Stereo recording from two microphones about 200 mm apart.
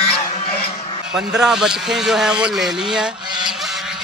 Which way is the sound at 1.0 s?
5° right (ahead or behind).